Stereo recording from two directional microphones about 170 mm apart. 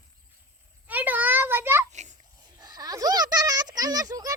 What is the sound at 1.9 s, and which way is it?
Babbling, 45° right (ahead or behind).